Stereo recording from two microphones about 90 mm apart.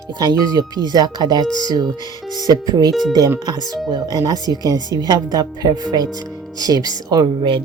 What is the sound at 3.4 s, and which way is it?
Speech, 50° right (ahead or behind).